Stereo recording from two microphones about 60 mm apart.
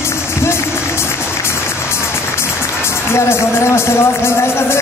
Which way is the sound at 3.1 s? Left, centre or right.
Left.